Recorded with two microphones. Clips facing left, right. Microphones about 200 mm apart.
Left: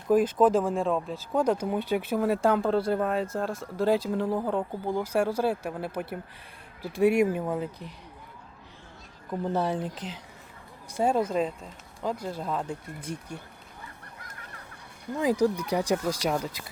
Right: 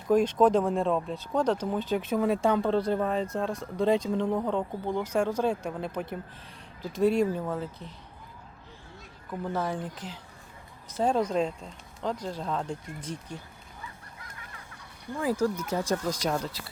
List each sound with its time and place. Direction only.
0.1 s speech: 5° left (ahead or behind)
9.4 s speech: 25° left (ahead or behind)
10.8 s speech: 10° left (ahead or behind)
14.2 s fowl: 45° left (ahead or behind)
15.2 s speech: 15° left (ahead or behind)